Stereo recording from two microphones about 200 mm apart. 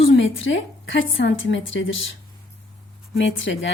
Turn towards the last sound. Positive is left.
turn(degrees=70)  # may be behind; listen again after turning